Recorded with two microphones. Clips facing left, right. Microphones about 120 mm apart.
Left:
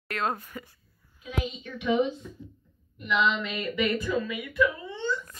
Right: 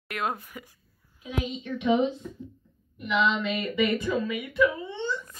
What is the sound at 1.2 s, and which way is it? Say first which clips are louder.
Speech: right 1 dB; 20° right (ahead or behind).